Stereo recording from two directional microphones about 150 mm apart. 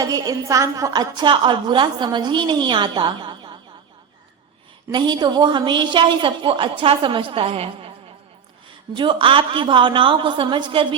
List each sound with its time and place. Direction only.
0.0 s a woman's voice: 25° right (ahead or behind)
4.9 s a woman's voice: 30° right (ahead or behind)